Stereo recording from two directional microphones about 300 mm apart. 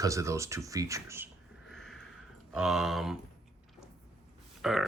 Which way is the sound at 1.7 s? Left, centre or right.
Centre.